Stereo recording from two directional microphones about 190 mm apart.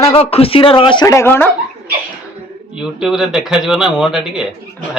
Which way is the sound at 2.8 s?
Centre (ahead or behind).